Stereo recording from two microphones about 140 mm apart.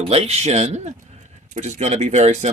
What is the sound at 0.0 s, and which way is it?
Speech, 45° right (ahead or behind).